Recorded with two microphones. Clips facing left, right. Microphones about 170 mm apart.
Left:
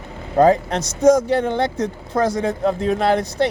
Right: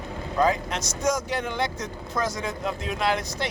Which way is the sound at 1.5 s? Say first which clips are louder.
Left 8 dB; 60° left (ahead or behind).